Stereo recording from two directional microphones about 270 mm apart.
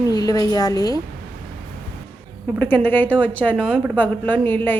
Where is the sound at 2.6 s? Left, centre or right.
Centre.